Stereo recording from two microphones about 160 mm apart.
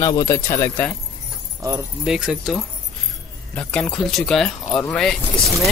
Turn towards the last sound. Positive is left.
turn(degrees=0)  # may be behind; listen again after turning